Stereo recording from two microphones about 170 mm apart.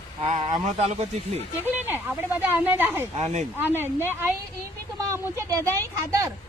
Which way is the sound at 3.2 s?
40° right (ahead or behind).